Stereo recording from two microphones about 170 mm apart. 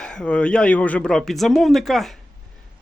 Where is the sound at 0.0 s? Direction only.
5° left (ahead or behind).